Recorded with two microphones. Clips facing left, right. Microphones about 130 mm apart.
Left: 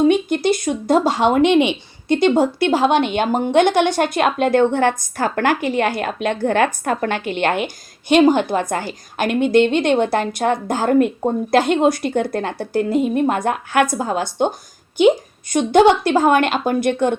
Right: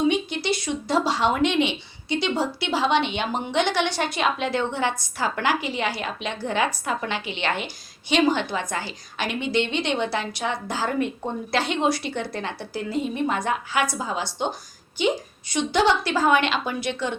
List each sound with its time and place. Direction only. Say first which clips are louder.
0.0 s speech: left 8 dB; 50° left (ahead or behind)